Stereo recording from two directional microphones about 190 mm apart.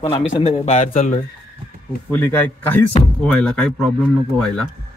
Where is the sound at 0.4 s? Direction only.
30° left (ahead or behind).